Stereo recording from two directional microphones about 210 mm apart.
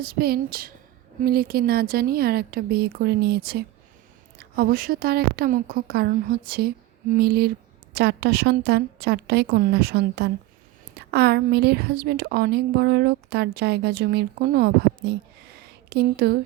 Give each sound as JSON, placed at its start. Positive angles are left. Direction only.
{"t": 0.0, "sound": "a woman's voice", "side_deg": -45}